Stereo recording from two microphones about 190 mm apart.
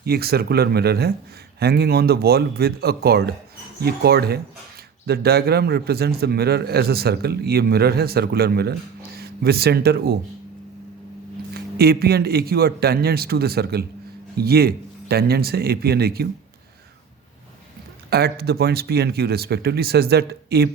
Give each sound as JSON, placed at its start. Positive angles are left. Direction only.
{"t": 0.0, "sound": "a man's voice", "side_deg": -55}
{"t": 11.5, "sound": "a man's voice", "side_deg": -55}
{"t": 18.1, "sound": "a man's voice", "side_deg": -55}